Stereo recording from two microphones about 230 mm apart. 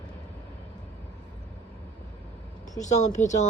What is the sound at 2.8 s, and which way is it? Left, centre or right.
Speech, left.